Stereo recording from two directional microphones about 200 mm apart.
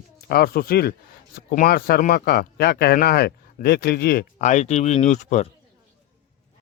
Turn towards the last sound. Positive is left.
turn(degrees=35)  # may be behind; listen again after turning